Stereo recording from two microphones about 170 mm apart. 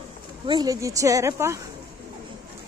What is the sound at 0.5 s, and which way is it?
A woman's voice, 20° right (ahead or behind).